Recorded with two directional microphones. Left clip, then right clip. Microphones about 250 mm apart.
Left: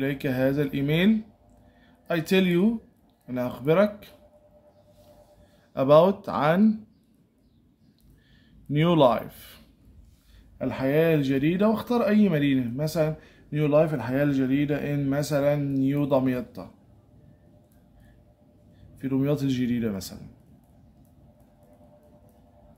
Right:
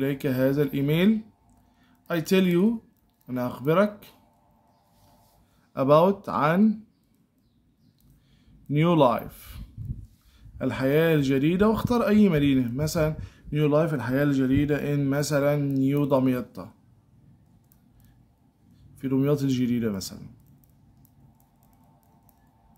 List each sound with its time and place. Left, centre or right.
0.0 s speech: centre
5.7 s speech: centre
8.6 s speech: centre
10.6 s speech: centre
18.9 s speech: centre